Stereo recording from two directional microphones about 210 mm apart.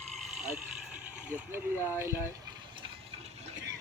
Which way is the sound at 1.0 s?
5° right (ahead or behind).